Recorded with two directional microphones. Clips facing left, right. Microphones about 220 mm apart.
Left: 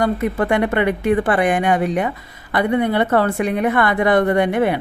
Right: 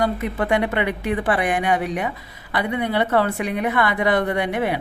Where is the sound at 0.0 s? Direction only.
50° left (ahead or behind).